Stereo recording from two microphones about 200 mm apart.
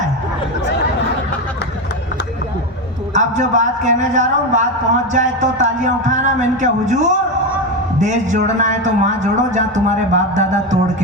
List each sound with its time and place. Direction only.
3.2 s a man's voice: 35° right (ahead or behind)